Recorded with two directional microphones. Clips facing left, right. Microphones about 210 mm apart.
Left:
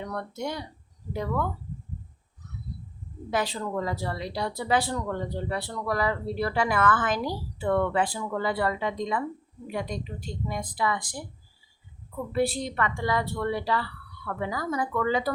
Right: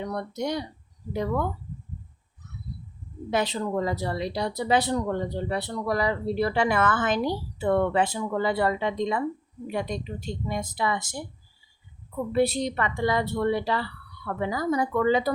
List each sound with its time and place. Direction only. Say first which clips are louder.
0.0 s a woman's voice: right 3 dB; 15° right (ahead or behind)
3.2 s a woman's voice: right 3 dB; 20° right (ahead or behind)
12.3 s a woman's voice: right 3 dB; 20° right (ahead or behind)